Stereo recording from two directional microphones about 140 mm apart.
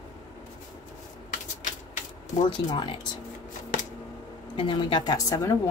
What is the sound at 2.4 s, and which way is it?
Speech, 35° left (ahead or behind).